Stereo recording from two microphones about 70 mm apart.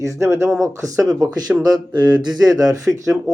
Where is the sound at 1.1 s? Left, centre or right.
Right.